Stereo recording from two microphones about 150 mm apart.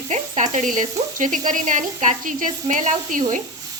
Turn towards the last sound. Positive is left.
turn(degrees=-55)  # may be behind; listen again after turning